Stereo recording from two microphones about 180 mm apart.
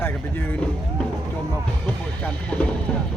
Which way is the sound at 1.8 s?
5° left (ahead or behind).